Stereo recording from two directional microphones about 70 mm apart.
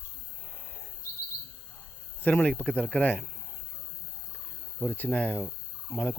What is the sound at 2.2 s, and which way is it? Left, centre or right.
Speech, left.